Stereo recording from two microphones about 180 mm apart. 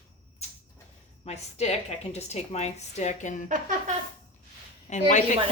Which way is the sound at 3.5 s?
45° right (ahead or behind).